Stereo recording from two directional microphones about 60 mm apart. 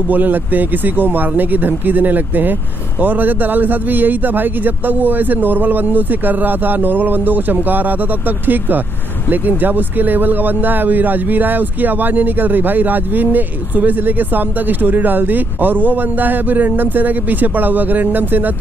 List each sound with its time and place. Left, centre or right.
0.1 s a man's voice: right